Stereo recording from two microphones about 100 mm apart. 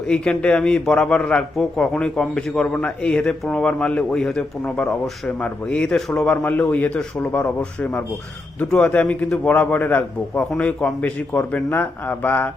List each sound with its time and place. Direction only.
0.1 s a man's voice: 10° left (ahead or behind)